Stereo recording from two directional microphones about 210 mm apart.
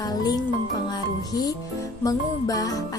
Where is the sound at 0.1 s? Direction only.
20° left (ahead or behind).